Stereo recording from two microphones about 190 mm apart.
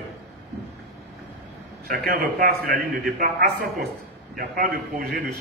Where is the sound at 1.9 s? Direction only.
50° right (ahead or behind).